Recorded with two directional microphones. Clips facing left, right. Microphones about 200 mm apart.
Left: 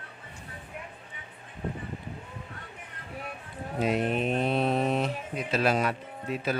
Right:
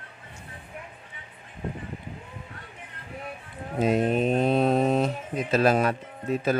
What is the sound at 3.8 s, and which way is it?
Speech, 45° right (ahead or behind).